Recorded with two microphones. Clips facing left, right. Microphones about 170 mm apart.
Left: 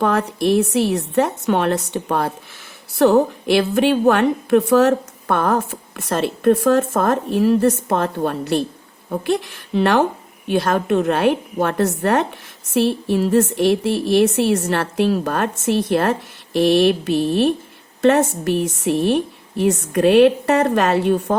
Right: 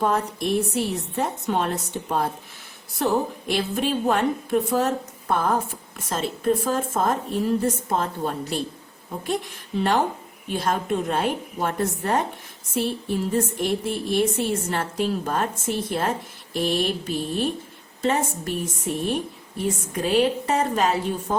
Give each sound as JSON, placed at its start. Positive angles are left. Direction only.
{"t": 0.0, "sound": "a woman's voice", "side_deg": 75}